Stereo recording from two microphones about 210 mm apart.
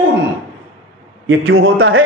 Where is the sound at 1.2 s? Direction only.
70° right (ahead or behind).